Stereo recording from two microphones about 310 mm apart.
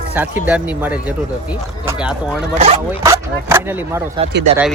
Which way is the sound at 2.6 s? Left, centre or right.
Right.